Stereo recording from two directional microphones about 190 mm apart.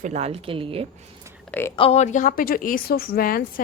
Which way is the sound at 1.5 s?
10° left (ahead or behind).